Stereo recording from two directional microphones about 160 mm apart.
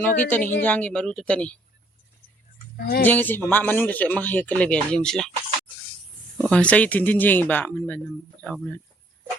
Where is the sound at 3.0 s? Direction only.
10° left (ahead or behind).